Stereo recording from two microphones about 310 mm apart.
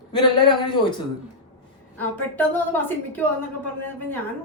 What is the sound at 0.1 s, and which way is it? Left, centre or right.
Speech, centre.